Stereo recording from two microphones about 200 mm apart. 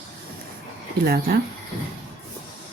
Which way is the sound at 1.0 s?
50° right (ahead or behind).